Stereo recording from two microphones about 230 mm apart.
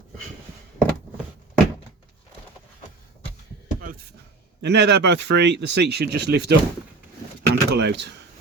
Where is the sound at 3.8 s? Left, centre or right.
Right.